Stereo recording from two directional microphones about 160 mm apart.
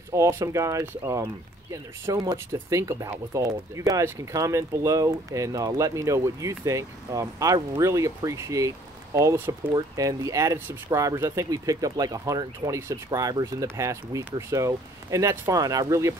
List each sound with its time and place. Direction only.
0.1 s speech: 20° right (ahead or behind)